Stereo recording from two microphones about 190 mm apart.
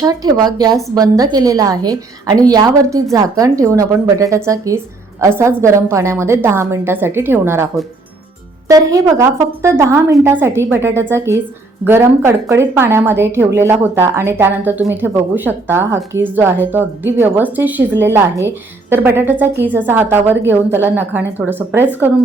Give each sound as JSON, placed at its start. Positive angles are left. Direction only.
{"t": 0.0, "sound": "a woman's voice", "side_deg": -20}